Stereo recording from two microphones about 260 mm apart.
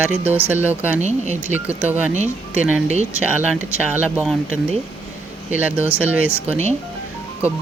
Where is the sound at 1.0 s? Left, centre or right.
Right.